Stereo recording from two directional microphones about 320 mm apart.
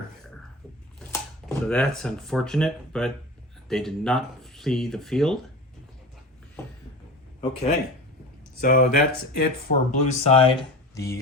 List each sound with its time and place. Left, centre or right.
0.9 s speech: centre
8.6 s speech: left
10.9 s speech: centre